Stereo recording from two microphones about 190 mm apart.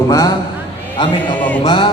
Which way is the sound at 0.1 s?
20° left (ahead or behind).